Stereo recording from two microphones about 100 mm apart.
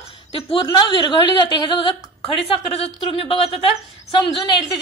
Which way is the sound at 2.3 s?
70° left (ahead or behind).